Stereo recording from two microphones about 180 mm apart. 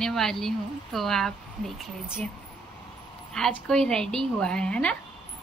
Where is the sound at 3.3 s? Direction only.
5° left (ahead or behind).